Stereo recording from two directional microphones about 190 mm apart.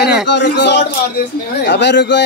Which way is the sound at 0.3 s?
65° left (ahead or behind).